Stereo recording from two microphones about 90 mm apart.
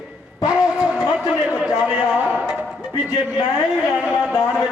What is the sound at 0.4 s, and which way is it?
Music, 10° right (ahead or behind).